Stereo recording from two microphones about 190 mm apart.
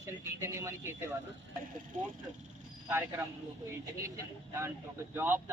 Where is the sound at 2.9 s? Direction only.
10° right (ahead or behind).